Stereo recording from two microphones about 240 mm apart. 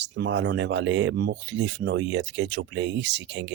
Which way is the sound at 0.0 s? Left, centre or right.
Right.